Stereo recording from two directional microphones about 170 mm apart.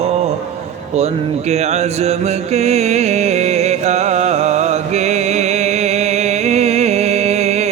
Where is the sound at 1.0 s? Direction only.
40° right (ahead or behind).